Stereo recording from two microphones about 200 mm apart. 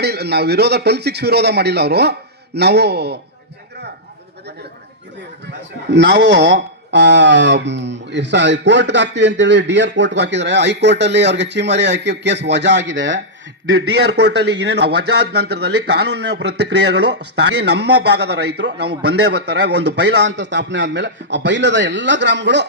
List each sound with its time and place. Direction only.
0.0 s a man's voice: 55° right (ahead or behind)
5.9 s a man's voice: 60° right (ahead or behind)
13.7 s a man's voice: 55° right (ahead or behind)